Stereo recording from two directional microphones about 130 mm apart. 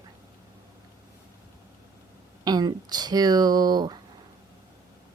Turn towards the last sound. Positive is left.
turn(degrees=-30)  # may be behind; listen again after turning